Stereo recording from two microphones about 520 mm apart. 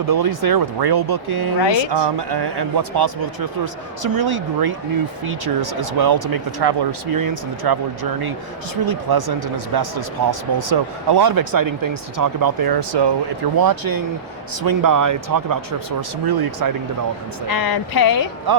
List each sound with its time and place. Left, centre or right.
0.1 s speech: right
8.9 s speech: right
17.5 s speech: left
18.5 s speech: right